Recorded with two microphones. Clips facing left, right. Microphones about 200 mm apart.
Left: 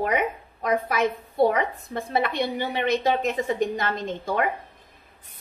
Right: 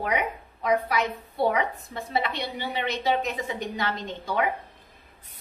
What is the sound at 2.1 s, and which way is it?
A woman's voice, 50° left (ahead or behind).